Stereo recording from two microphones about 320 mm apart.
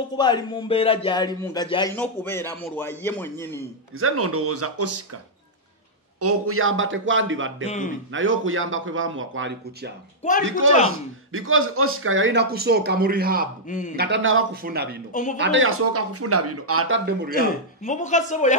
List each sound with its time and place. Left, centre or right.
0.2 s speech: centre
4.0 s speech: right
6.1 s speech: right
7.6 s speech: left
8.1 s speech: right
13.7 s speech: left
13.9 s speech: right
17.4 s speech: left